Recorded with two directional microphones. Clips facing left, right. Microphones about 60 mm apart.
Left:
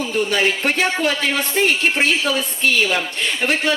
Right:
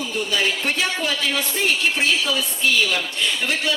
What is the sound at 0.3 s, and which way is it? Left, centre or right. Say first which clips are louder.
Speech: left 4 dB; left.